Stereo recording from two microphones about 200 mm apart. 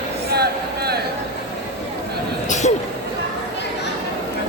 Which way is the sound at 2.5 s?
35° left (ahead or behind).